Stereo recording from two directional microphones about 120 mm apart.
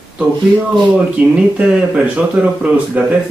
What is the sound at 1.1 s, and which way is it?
Speech, 5° right (ahead or behind).